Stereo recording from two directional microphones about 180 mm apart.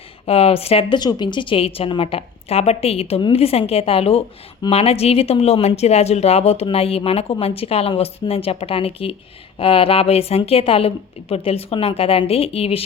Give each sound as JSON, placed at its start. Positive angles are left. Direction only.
{"t": 0.3, "sound": "speech", "side_deg": 35}